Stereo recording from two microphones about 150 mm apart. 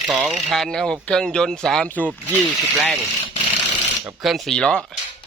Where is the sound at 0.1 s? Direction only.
Centre (ahead or behind).